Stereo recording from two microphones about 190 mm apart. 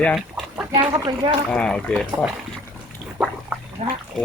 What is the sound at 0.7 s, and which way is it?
Speech, 20° right (ahead or behind).